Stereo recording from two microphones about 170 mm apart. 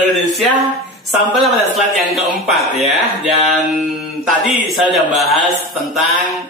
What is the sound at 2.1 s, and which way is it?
A man's voice, centre (ahead or behind).